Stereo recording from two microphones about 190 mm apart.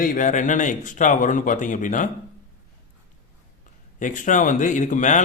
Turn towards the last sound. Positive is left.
turn(degrees=40)  # may be behind; listen again after turning